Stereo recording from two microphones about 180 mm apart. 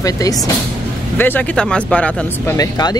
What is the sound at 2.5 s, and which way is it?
Speech, 20° left (ahead or behind).